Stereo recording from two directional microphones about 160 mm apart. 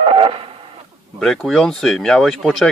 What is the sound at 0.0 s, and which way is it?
Radio, 35° right (ahead or behind).